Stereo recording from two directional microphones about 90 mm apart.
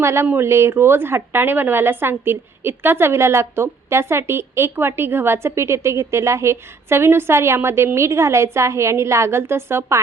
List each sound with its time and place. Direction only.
0.0 s speech: 30° right (ahead or behind)